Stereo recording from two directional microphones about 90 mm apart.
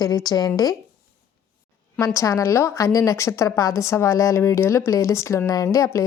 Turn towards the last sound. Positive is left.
turn(degrees=35)  # may be behind; listen again after turning